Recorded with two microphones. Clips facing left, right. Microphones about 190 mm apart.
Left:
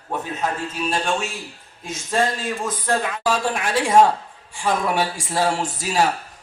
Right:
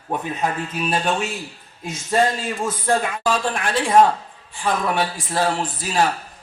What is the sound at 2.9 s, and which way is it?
A man's voice, 10° left (ahead or behind).